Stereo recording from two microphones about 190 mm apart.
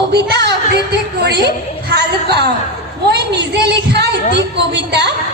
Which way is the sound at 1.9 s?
60° right (ahead or behind).